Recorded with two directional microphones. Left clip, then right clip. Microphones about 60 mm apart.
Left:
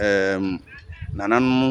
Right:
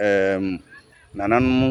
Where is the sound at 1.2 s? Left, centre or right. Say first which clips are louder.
Even; left.